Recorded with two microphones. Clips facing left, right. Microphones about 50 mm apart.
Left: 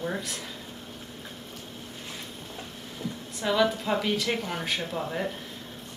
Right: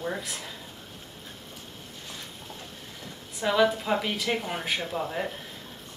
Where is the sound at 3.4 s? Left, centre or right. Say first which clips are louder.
Right 1 dB; centre.